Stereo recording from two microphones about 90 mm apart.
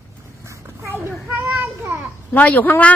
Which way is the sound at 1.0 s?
20° right (ahead or behind).